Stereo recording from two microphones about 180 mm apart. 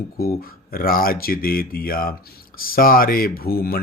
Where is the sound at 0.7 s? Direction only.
55° left (ahead or behind).